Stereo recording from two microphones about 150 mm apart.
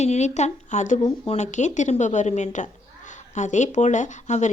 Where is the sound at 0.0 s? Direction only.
50° left (ahead or behind).